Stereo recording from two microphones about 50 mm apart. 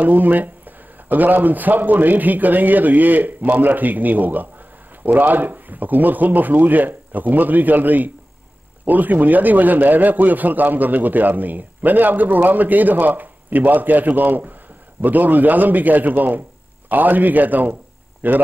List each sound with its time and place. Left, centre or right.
0.0 s a man's voice: right